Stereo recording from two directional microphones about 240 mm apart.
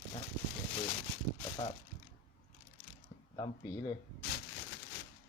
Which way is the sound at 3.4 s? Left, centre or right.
Centre.